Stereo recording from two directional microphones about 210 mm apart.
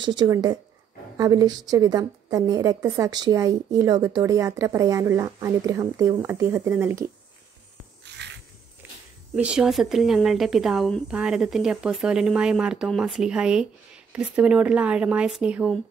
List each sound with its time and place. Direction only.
0.0 s a woman's voice: 20° right (ahead or behind)
8.0 s a sound: 55° right (ahead or behind)
9.3 s a woman's voice: 5° right (ahead or behind)